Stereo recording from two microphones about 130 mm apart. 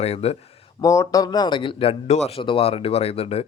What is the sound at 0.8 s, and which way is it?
A man's voice, 25° left (ahead or behind).